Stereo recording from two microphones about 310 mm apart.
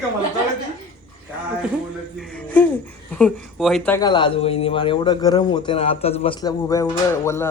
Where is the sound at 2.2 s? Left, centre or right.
Centre.